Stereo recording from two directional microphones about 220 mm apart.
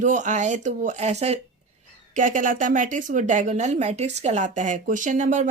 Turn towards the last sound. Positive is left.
turn(degrees=-35)  # may be behind; listen again after turning